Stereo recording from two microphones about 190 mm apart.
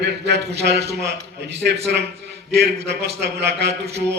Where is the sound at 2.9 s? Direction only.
60° right (ahead or behind).